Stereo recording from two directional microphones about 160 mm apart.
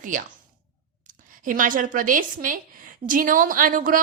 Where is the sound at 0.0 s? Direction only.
55° right (ahead or behind).